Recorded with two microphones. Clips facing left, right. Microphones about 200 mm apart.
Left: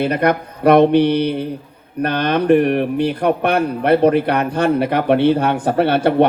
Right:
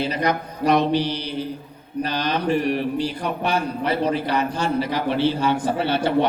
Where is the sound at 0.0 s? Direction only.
55° left (ahead or behind).